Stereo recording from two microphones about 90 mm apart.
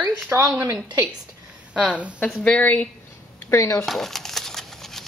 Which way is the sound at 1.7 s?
15° right (ahead or behind).